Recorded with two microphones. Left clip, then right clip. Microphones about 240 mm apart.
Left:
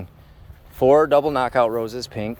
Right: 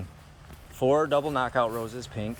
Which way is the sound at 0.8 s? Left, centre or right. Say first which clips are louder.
Left 8 dB; left.